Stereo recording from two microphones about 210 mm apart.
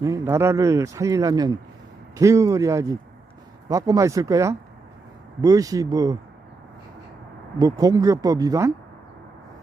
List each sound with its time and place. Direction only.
0.0 s speech: 15° right (ahead or behind)
7.6 s speech: 15° right (ahead or behind)